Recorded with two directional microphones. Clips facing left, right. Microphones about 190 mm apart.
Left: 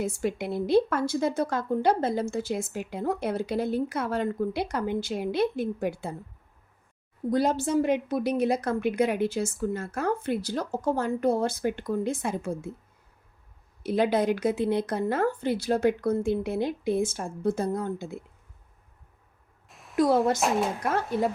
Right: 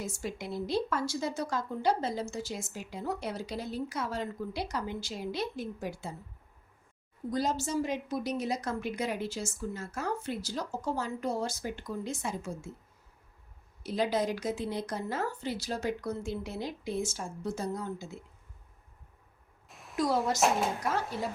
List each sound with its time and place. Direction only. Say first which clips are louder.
0.0 s a woman's voice: left 9 dB; 60° left (ahead or behind)
7.3 s a woman's voice: left 7 dB; 60° left (ahead or behind)
13.8 s a woman's voice: left 6 dB; 60° left (ahead or behind)
19.6 s a sound: even; centre (ahead or behind)
20.0 s a woman's voice: left 6 dB; 55° left (ahead or behind)